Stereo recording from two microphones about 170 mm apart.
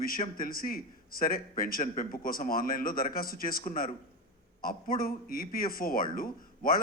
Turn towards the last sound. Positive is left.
turn(degrees=55)  # may be behind; listen again after turning